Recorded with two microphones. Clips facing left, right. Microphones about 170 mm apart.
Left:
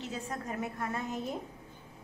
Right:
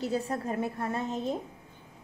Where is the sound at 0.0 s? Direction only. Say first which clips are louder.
Right 8 dB; 35° right (ahead or behind).